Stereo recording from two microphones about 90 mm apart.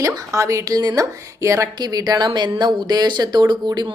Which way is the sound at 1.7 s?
50° right (ahead or behind).